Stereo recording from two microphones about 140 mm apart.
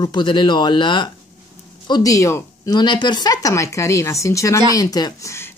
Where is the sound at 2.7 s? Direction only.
30° left (ahead or behind).